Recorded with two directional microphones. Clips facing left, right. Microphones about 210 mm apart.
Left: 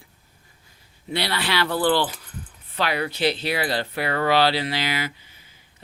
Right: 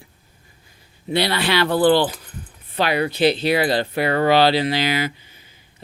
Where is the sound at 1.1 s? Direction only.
20° right (ahead or behind).